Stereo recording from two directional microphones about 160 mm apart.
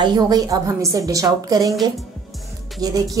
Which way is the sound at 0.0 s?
25° right (ahead or behind).